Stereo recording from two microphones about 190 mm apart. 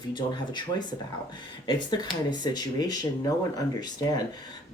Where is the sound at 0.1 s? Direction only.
25° left (ahead or behind).